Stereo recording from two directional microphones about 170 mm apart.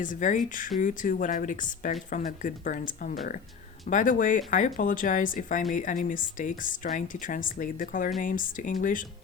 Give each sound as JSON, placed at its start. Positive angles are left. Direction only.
{"t": 0.0, "sound": "speech", "side_deg": 50}